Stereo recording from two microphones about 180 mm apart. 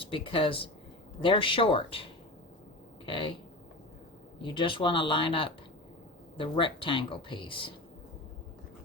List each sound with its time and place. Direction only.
0.0 s speech: 30° left (ahead or behind)
3.1 s speech: 25° left (ahead or behind)
4.4 s speech: 25° left (ahead or behind)